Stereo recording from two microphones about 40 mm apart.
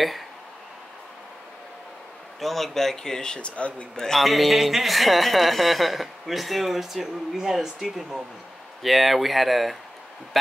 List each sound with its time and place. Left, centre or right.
2.4 s speech: centre; by 3.8 s left
3.9 s speech: centre
4.2 s speech: centre